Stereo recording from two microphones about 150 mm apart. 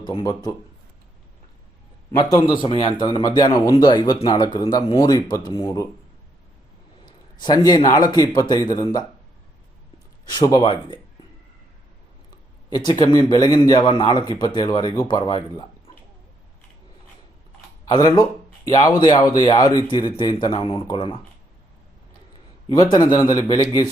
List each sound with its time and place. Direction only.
0.0 s speech: 30° left (ahead or behind)
2.1 s speech: 25° left (ahead or behind)
7.0 s speech: 30° left (ahead or behind)
10.2 s speech: 25° left (ahead or behind)
12.7 s speech: 30° left (ahead or behind)
17.8 s a man's voice: 25° left (ahead or behind)
22.7 s speech: 25° left (ahead or behind)